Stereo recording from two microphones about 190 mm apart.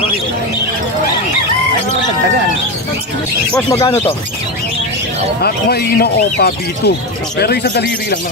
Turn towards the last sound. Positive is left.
turn(degrees=60)  # may be behind; listen again after turning